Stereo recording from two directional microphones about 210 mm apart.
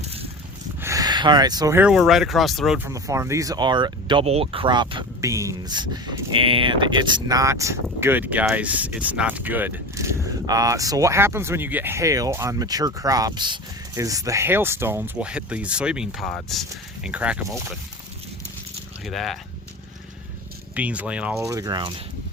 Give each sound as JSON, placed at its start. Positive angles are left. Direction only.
{"t": 0.0, "sound": "a sound", "side_deg": -30}
{"t": 0.8, "sound": "speech", "side_deg": -15}
{"t": 19.0, "sound": "speech", "side_deg": 0}
{"t": 20.7, "sound": "speech", "side_deg": -5}